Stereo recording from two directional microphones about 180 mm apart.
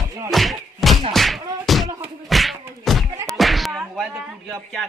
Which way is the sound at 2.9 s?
Centre (ahead or behind).